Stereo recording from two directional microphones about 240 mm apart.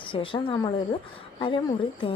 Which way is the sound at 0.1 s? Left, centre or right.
Left.